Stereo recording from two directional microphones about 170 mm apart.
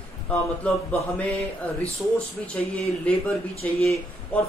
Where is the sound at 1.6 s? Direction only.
10° left (ahead or behind).